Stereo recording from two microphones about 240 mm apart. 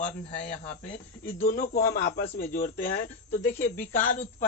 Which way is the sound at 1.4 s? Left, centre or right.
Left.